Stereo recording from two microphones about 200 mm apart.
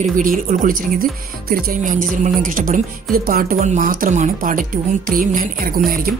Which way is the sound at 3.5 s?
35° right (ahead or behind).